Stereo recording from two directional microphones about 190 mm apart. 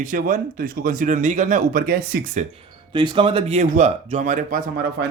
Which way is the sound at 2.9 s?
25° right (ahead or behind).